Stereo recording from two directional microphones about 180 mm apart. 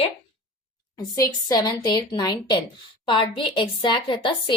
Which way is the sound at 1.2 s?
20° left (ahead or behind).